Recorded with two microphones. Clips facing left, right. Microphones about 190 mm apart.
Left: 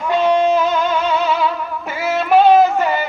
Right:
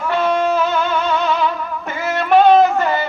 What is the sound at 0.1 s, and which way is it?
Music, 15° left (ahead or behind).